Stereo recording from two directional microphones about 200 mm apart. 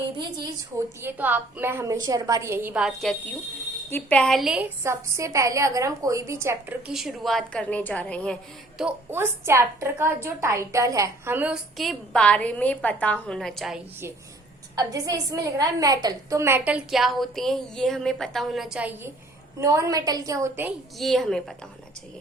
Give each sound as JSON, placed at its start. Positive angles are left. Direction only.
{"t": 0.7, "sound": "a woman's voice", "side_deg": -15}
{"t": 4.8, "sound": "a woman's voice", "side_deg": -15}
{"t": 8.8, "sound": "a woman's voice", "side_deg": -10}
{"t": 14.8, "sound": "a woman's voice", "side_deg": -15}
{"t": 21.0, "sound": "a woman's voice", "side_deg": 0}